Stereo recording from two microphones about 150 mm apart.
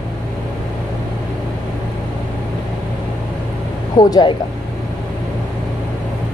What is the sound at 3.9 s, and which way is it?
Speech, 25° left (ahead or behind).